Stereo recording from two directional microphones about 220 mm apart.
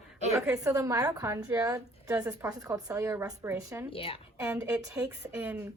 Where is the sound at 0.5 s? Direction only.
15° right (ahead or behind).